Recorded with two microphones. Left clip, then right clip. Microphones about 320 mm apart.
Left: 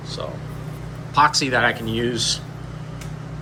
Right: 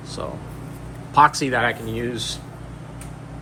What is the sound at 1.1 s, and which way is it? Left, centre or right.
Speech, centre.